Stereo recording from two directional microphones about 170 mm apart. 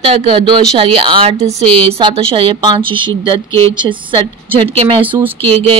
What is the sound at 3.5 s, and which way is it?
Speech, 15° left (ahead or behind).